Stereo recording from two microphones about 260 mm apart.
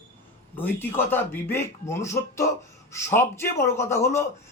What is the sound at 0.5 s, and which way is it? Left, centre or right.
A man's voice, centre.